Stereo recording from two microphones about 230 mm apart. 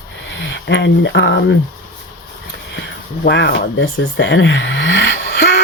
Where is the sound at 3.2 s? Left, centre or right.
Left.